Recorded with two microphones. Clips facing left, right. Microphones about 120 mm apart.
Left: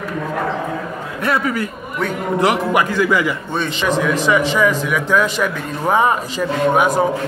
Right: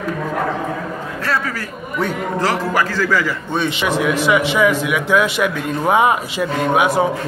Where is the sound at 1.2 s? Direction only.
20° left (ahead or behind).